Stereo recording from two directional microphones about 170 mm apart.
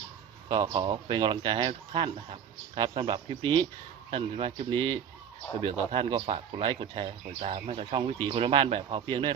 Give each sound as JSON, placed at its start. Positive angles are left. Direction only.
{"t": 0.4, "sound": "speech", "side_deg": -30}